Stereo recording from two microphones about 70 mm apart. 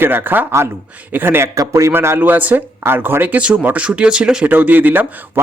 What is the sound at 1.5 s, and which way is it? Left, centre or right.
Speech, right.